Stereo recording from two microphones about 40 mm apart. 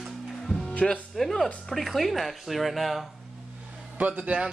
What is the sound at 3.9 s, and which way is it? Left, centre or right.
Speech, right.